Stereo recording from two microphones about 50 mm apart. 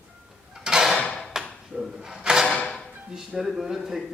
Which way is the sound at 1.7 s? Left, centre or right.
Centre.